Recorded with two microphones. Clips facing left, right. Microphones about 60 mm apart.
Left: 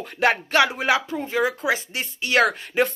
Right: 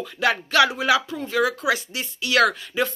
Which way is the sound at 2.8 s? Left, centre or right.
Left.